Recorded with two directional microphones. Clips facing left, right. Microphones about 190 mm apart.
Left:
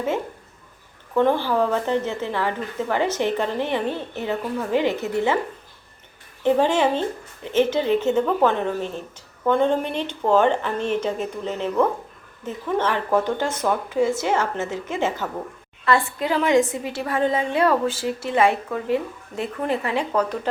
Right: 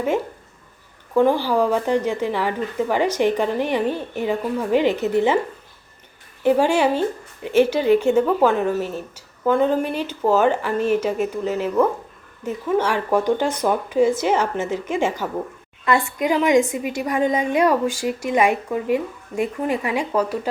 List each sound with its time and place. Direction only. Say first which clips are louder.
1.1 s speech: right 2 dB; 10° right (ahead or behind)
6.4 s speech: right 2 dB; 10° right (ahead or behind)